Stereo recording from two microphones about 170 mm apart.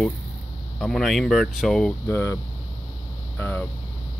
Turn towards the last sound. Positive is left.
turn(degrees=10)  # may be behind; listen again after turning